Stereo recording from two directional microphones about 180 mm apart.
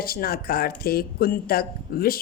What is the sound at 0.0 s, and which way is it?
A woman's voice, 55° left (ahead or behind).